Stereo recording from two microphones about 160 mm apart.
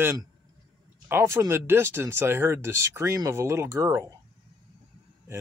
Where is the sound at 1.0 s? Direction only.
15° right (ahead or behind).